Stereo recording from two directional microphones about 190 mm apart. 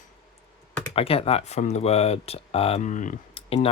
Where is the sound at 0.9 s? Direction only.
30° left (ahead or behind).